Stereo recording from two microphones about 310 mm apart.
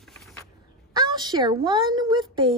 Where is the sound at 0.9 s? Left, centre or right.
Centre.